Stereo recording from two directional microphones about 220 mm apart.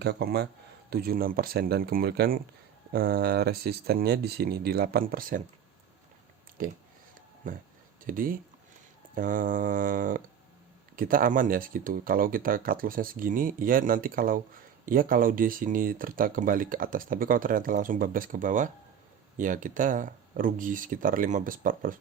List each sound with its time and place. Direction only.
0.0 s speech: 45° right (ahead or behind)
6.6 s speech: 40° right (ahead or behind)